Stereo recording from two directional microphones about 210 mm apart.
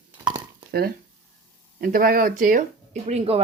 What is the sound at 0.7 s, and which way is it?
Speech, 50° right (ahead or behind).